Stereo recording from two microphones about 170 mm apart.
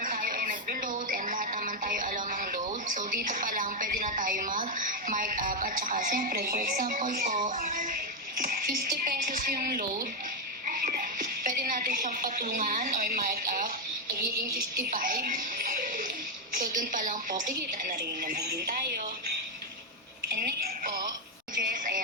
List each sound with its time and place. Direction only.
0.0 s music: 50° right (ahead or behind)
8.4 s a woman's voice: 55° right (ahead or behind)
20.3 s music: 65° right (ahead or behind)
21.6 s a sound: 55° right (ahead or behind)